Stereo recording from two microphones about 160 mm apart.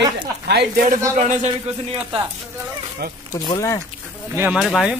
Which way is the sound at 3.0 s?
80° right.